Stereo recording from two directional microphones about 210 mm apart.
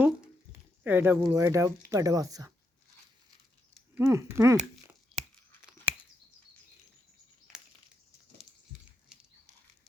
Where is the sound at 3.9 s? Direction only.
10° right (ahead or behind).